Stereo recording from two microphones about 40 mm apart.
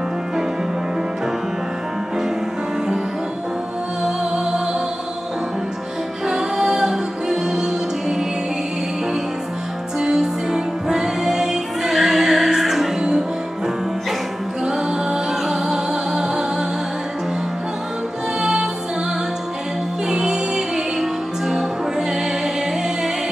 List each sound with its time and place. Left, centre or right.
4.0 s music: centre
6.2 s music: centre
9.9 s music: centre
14.6 s music: centre
18.4 s music: centre
20.1 s music: centre